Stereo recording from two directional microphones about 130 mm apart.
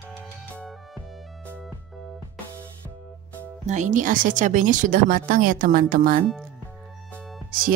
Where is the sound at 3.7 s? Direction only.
70° right (ahead or behind); by 6.2 s 90° right.